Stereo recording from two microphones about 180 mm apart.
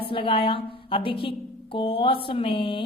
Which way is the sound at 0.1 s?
30° left (ahead or behind).